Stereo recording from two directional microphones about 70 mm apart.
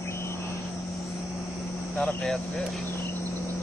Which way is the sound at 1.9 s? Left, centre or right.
Centre.